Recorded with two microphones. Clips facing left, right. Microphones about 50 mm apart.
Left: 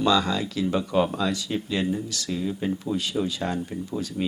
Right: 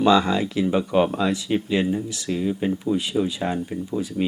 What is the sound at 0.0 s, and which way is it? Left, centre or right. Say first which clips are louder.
Speech: right 4 dB; right.